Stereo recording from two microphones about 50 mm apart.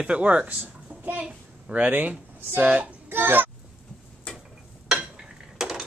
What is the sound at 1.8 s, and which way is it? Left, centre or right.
Speech, right.